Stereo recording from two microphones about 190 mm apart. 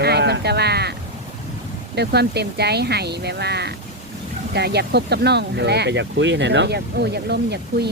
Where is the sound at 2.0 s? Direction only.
60° right (ahead or behind).